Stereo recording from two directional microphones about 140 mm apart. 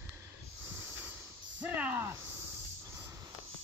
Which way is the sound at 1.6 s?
10° right (ahead or behind).